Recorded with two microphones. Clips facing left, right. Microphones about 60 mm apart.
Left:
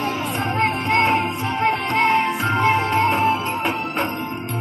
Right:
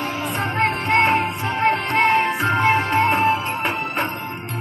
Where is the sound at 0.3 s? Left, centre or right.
Right.